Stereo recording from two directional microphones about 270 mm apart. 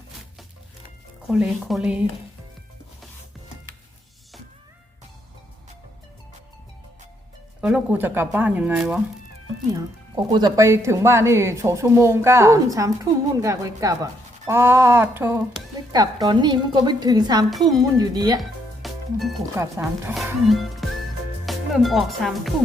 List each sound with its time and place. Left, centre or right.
1.3 s speech: centre
7.6 s speech: centre
10.3 s speech: centre
18.8 s speech: centre